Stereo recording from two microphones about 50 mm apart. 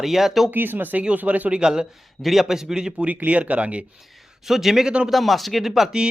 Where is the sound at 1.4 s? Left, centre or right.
Centre.